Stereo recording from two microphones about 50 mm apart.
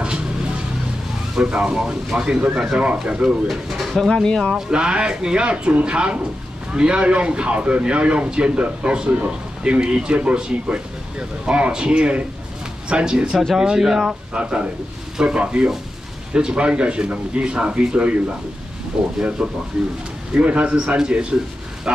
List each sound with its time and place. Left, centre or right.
1.4 s speech: right
3.4 s speech: centre
4.1 s speech: centre
4.6 s speech: centre
14.3 s speech: right
19.7 s speech: centre
20.3 s speech: right